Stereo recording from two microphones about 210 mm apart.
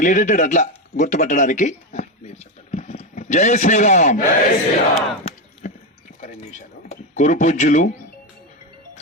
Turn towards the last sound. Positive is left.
turn(degrees=35)  # may be behind; listen again after turning